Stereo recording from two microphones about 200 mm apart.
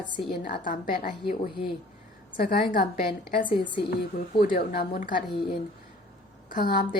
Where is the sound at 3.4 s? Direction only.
25° left (ahead or behind).